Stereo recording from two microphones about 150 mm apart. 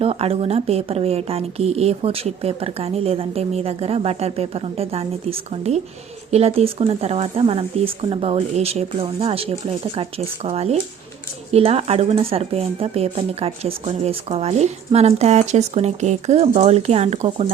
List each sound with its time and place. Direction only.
0.0 s a woman's voice: 40° right (ahead or behind)